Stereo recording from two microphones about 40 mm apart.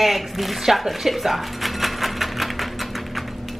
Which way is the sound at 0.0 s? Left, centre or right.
Centre.